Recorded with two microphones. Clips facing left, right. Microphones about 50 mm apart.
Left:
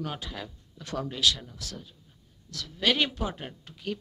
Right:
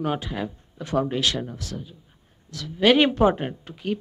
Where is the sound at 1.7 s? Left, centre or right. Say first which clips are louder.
Right 8 dB; centre.